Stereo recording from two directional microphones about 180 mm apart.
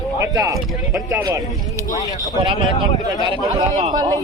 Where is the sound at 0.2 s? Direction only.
20° right (ahead or behind).